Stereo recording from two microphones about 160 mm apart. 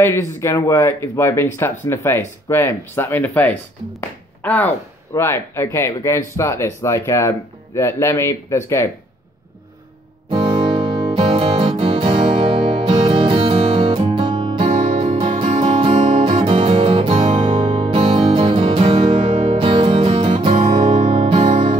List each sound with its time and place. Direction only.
0.0 s speech: 15° left (ahead or behind)
10.3 s music: 30° right (ahead or behind)